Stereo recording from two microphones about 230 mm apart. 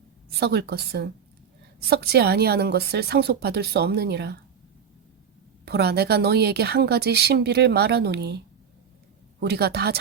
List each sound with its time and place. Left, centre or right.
0.3 s a woman's voice: right
5.6 s a woman's voice: right
9.4 s a woman's voice: right